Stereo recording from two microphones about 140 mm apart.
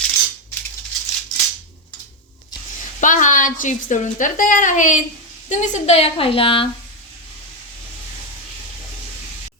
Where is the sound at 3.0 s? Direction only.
65° left (ahead or behind); by 6.7 s 40° left (ahead or behind).